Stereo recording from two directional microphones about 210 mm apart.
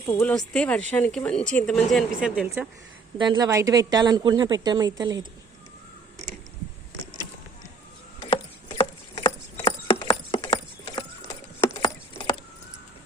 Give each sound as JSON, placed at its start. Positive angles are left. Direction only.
{"t": 0.0, "sound": "speech", "side_deg": 10}
{"t": 3.2, "sound": "speech", "side_deg": -20}
{"t": 8.2, "sound": "horse", "side_deg": 25}
{"t": 11.8, "sound": "a sound", "side_deg": 20}